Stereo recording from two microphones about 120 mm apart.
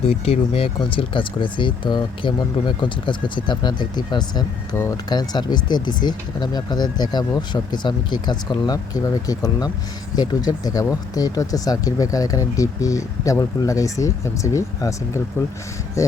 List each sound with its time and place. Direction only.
0.0 s speech: 55° left (ahead or behind); by 4.4 s 35° left (ahead or behind)
4.7 s speech: 25° left (ahead or behind)